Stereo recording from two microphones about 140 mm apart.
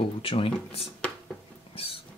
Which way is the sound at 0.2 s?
40° left (ahead or behind).